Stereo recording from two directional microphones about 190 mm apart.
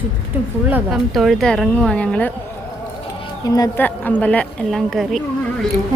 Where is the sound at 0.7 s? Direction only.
Centre (ahead or behind).